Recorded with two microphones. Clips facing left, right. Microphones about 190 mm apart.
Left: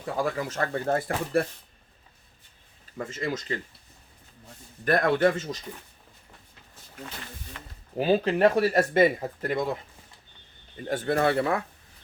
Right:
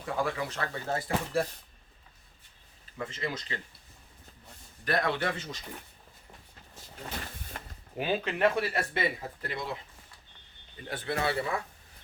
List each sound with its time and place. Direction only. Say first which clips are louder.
0.0 s speech: left 3 dB; 45° left (ahead or behind); by 1.5 s 60° left (ahead or behind)
3.0 s speech: left 4 dB; 45° left (ahead or behind)
4.9 s speech: left 8 dB; 50° left (ahead or behind)
7.6 s a sound: right 1 dB; 45° right (ahead or behind)
7.9 s speech: left 8 dB; 35° left (ahead or behind)
10.8 s speech: left 7 dB; 45° left (ahead or behind)